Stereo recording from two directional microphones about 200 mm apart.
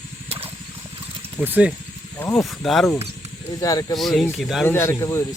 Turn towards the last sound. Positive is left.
turn(degrees=15)  # may be behind; listen again after turning